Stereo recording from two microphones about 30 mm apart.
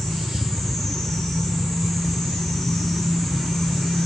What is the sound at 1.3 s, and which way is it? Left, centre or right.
Vehicle, centre.